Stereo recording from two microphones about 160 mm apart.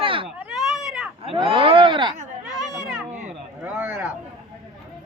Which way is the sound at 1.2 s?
35° right (ahead or behind).